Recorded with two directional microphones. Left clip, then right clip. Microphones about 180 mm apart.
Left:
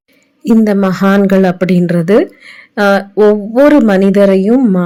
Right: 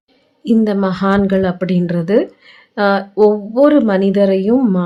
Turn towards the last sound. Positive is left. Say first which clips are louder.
# left 4 dB
turn(degrees=15)  # may be behind; listen again after turning